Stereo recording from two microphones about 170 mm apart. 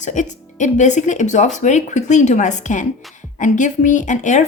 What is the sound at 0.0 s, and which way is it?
Speech, 45° left (ahead or behind).